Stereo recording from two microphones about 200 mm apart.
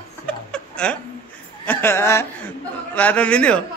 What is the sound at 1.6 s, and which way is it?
A man's voice, 10° left (ahead or behind).